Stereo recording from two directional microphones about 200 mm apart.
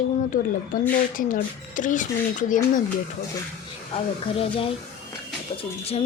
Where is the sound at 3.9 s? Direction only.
30° left (ahead or behind).